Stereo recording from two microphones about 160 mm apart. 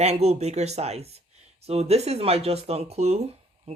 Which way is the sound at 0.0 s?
40° right (ahead or behind).